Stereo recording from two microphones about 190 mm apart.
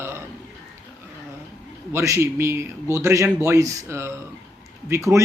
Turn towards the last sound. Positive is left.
turn(degrees=-15)  # may be behind; listen again after turning